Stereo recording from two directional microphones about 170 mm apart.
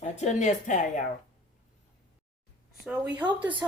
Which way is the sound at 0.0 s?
40° left (ahead or behind).